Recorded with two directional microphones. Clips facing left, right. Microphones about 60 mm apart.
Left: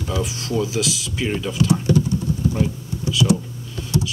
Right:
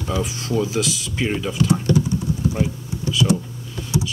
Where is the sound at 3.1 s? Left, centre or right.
Centre.